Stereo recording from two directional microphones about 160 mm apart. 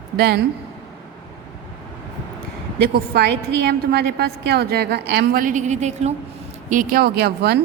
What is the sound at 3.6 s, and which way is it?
A woman's voice, 85° right.